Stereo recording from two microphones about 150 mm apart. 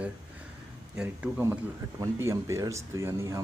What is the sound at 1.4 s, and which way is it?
Speech, 15° right (ahead or behind).